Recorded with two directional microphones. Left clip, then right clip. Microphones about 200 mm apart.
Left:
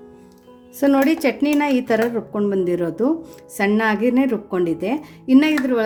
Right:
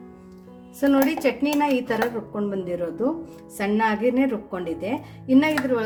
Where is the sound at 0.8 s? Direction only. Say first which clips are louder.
Left 4 dB; 40° left (ahead or behind).